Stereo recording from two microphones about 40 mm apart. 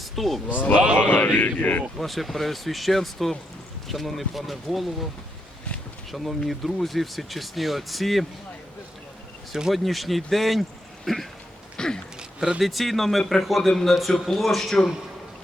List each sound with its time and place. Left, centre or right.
0.0 s speech: centre
0.4 s speech: left
0.9 s speech: left
1.4 s speech: left
2.0 s speech: centre
6.1 s speech: centre
9.7 s speech: centre
11.8 s a sound: centre
12.5 s speech: centre